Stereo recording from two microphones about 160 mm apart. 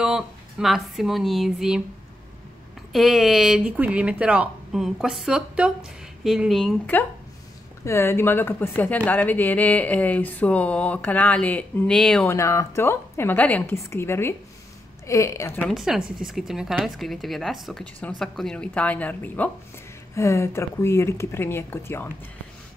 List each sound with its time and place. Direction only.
0.0 s speech: 5° right (ahead or behind)
2.9 s speech: centre (ahead or behind)
7.8 s speech: 15° left (ahead or behind)
12.3 s speech: 20° left (ahead or behind)
15.7 s speech: centre (ahead or behind); by 22.1 s 15° left (ahead or behind)